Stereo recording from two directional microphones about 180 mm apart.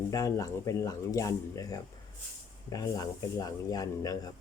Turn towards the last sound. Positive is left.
turn(degrees=20)  # may be behind; listen again after turning